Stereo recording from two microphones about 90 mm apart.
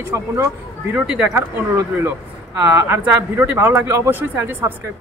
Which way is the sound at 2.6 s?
30° right (ahead or behind).